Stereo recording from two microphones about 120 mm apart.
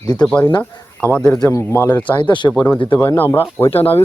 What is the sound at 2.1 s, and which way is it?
Speech, 40° left (ahead or behind).